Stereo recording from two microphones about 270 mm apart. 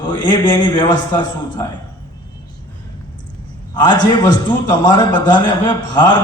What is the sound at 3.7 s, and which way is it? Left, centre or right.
A man's voice, centre.